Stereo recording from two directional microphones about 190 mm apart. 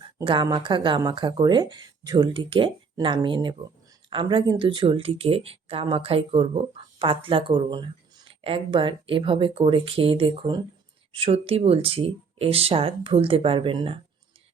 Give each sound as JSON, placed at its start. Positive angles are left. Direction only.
{"t": 0.2, "sound": "speech", "side_deg": -20}